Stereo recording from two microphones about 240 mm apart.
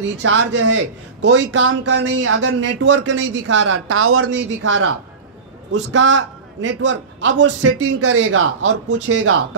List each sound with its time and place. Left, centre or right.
0.0 s speech: right
3.5 s a man's voice: right